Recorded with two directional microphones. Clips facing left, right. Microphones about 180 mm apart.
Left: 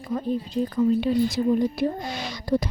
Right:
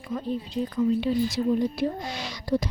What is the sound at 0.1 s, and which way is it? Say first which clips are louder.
Speech: left 3 dB; 45° left (ahead or behind).